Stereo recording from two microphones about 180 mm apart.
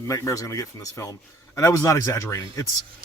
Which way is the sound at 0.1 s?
20° left (ahead or behind).